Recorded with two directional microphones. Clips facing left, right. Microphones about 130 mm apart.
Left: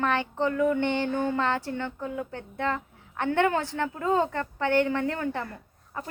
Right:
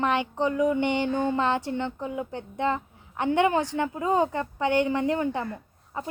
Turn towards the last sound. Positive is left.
turn(degrees=-15)  # may be behind; listen again after turning